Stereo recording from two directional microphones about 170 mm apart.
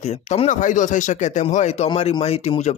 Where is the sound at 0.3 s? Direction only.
45° left (ahead or behind).